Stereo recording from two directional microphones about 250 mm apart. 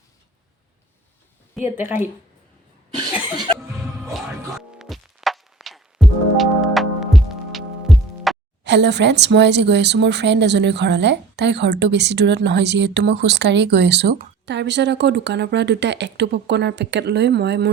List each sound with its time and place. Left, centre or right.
1.5 s speech: centre
3.1 s cough: centre
3.3 s music: centre
4.1 s music: centre
8.6 s speech: right